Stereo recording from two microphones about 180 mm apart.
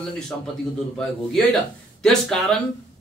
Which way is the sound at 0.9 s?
Centre (ahead or behind).